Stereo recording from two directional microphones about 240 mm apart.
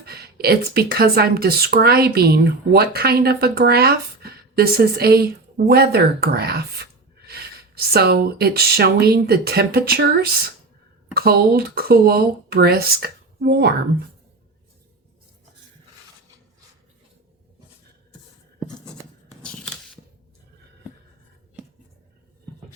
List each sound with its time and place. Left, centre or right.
0.0 s speech: right
19.4 s scissors: centre